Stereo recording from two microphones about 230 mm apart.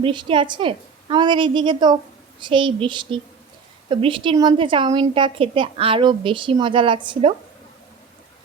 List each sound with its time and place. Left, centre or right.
0.0 s a woman's voice: right